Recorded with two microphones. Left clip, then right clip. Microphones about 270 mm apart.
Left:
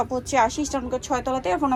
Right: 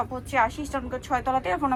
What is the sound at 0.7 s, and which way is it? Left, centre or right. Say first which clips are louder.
A woman's voice: left 2 dB; centre.